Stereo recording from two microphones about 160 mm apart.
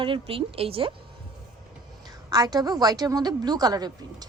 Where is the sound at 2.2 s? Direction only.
25° right (ahead or behind).